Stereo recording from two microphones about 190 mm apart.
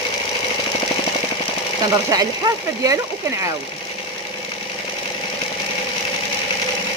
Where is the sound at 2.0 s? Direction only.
20° right (ahead or behind).